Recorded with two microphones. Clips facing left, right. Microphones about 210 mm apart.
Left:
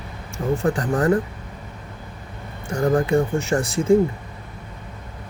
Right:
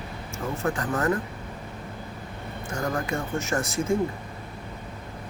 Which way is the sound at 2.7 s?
30° left (ahead or behind).